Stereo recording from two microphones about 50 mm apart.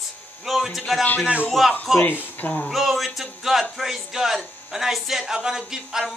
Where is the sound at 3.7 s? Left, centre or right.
Centre.